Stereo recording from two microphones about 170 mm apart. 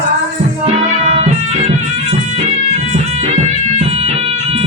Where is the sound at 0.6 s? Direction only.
40° right (ahead or behind).